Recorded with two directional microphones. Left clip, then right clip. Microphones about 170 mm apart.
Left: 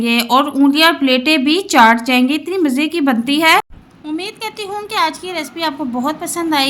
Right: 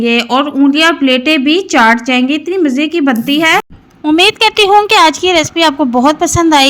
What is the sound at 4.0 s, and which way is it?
A woman's voice, 45° right (ahead or behind).